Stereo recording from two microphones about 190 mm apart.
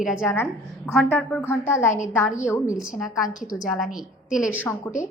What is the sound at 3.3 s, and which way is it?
Speech, 45° left (ahead or behind).